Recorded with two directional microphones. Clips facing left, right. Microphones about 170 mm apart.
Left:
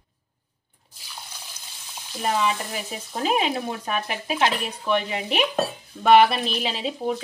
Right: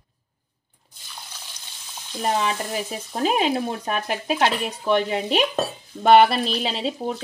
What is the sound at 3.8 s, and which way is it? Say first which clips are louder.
Speech: right 3 dB; 35° right (ahead or behind).